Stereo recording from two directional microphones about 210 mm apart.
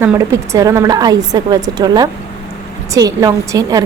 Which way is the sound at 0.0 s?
10° right (ahead or behind).